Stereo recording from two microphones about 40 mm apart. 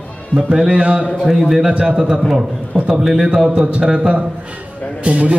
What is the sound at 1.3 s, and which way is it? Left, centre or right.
Speech, centre.